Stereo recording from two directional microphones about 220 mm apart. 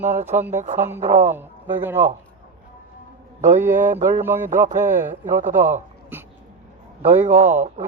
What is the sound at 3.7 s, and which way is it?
Speech, 35° right (ahead or behind).